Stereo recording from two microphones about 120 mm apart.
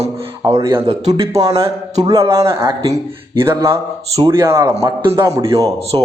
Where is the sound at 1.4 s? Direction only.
30° right (ahead or behind).